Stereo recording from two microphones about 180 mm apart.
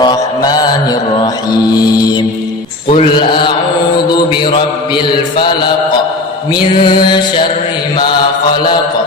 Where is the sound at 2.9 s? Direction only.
30° left (ahead or behind).